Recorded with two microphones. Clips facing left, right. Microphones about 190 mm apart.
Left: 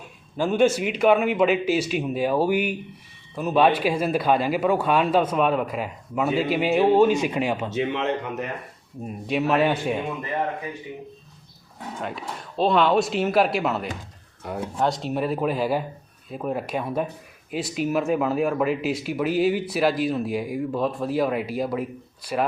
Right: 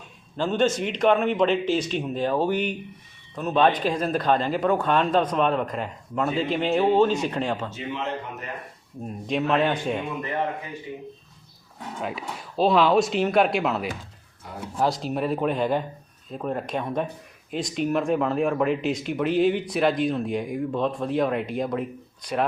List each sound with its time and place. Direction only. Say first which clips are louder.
0.3 s speech: left 3 dB; 10° left (ahead or behind)
7.7 s speech: left 6 dB; 75° left (ahead or behind)
9.0 s speech: left 1 dB; 5° left (ahead or behind)
11.9 s speech: right 1 dB; centre (ahead or behind)